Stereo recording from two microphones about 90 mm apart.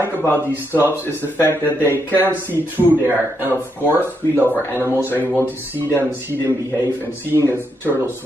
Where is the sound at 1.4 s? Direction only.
25° left (ahead or behind).